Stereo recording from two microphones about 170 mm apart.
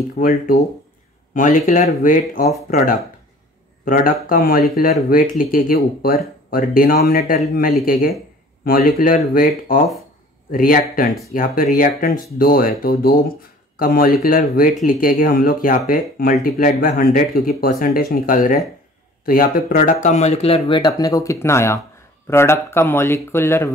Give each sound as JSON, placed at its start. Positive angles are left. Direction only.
{"t": 0.2, "sound": "speech", "side_deg": 55}
{"t": 10.5, "sound": "speech", "side_deg": 55}